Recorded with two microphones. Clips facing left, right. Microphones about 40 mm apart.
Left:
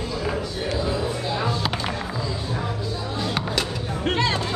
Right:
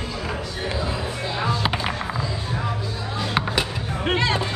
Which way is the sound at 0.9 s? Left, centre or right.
Right.